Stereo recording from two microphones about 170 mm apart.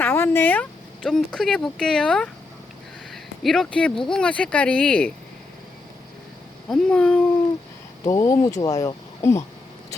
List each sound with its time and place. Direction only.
0.0 s speech: 15° left (ahead or behind)
6.7 s speech: 5° left (ahead or behind)
8.0 s speech: 20° left (ahead or behind)